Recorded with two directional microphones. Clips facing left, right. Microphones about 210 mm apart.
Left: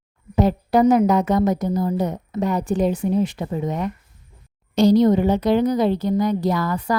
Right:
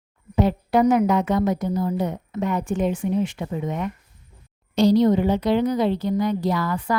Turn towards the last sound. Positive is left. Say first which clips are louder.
# left 2 dB
turn(degrees=40)  # may be behind; listen again after turning